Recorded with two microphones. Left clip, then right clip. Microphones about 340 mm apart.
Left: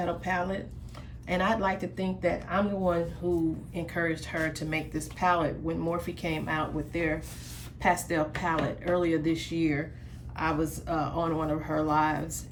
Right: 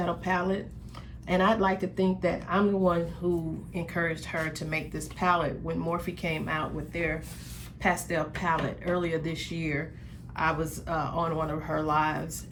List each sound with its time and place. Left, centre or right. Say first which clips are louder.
0.0 s speech: right 1 dB; centre